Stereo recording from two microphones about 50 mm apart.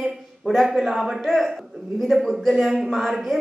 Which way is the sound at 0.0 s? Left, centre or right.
Centre.